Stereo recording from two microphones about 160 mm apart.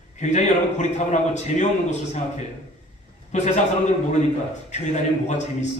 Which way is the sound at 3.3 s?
50° left (ahead or behind).